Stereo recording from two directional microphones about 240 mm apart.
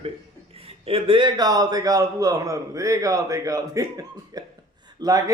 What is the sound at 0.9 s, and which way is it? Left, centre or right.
A man's voice, right.